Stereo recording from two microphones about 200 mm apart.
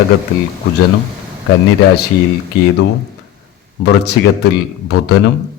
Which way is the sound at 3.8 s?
55° left (ahead or behind).